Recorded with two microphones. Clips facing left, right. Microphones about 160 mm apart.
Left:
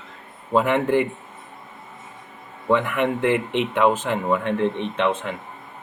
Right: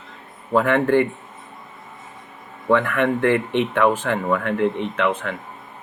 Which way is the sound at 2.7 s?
15° left (ahead or behind).